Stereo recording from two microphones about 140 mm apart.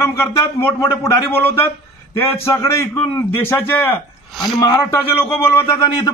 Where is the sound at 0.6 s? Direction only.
20° left (ahead or behind).